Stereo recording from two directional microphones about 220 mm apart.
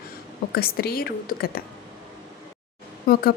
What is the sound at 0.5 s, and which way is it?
Speech, 45° left (ahead or behind).